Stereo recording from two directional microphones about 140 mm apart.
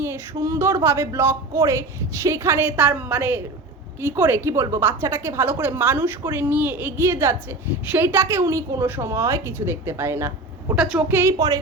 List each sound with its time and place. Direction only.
0.0 s a woman's voice: 20° right (ahead or behind)